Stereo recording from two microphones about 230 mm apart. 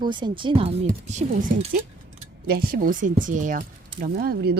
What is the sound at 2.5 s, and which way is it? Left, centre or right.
Speech, right.